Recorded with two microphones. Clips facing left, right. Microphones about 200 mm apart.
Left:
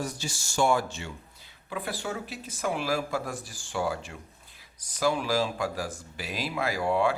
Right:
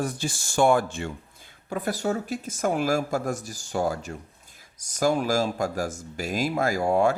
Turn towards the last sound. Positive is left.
turn(degrees=-45)  # may be behind; listen again after turning